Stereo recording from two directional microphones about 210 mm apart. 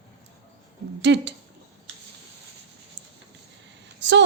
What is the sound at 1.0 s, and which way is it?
Speech, 55° right (ahead or behind).